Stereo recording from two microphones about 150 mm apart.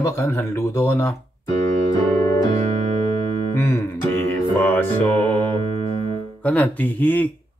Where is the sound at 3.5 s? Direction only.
20° left (ahead or behind).